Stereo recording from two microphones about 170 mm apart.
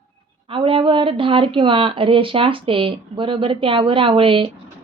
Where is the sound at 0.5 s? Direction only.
30° right (ahead or behind).